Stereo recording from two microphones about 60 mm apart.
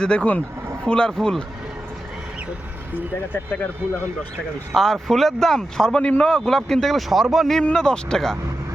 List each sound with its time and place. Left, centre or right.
0.0 s speech: centre
4.7 s speech: centre
7.6 s speech: centre